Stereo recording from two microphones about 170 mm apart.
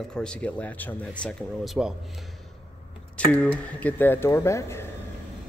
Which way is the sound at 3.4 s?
10° left (ahead or behind).